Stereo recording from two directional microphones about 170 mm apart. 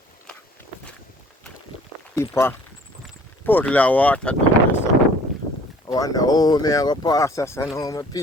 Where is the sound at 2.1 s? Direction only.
15° left (ahead or behind).